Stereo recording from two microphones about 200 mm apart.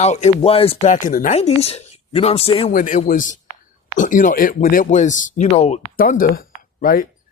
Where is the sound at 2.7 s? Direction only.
40° left (ahead or behind).